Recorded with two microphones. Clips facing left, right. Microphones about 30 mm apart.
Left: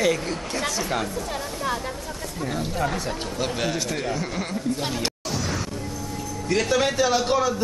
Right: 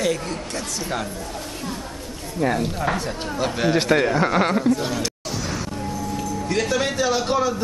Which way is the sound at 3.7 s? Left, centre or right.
Right.